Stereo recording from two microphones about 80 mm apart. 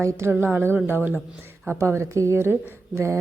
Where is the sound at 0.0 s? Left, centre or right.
Right.